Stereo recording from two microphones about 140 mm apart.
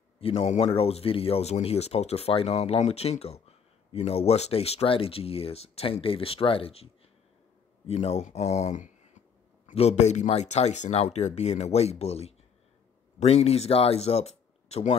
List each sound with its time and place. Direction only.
0.2 s speech: 45° left (ahead or behind)